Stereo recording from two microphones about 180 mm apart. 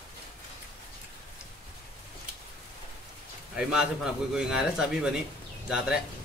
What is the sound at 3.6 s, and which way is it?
A man's voice, 5° right (ahead or behind).